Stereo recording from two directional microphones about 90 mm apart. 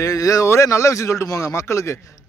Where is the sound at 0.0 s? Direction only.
40° left (ahead or behind).